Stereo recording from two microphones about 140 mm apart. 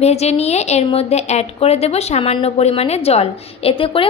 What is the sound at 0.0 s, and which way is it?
A woman's voice, 50° left (ahead or behind).